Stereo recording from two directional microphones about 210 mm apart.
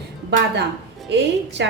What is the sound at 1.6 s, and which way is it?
Speech, 55° right (ahead or behind).